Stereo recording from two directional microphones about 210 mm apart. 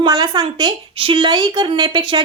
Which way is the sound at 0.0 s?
20° right (ahead or behind).